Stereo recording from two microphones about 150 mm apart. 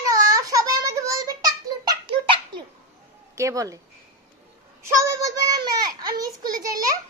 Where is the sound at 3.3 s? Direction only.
20° right (ahead or behind).